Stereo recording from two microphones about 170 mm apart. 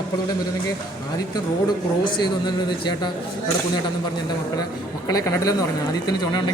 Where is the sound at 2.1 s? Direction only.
25° left (ahead or behind).